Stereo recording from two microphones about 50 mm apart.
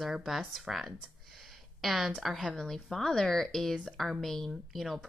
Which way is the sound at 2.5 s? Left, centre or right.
Centre.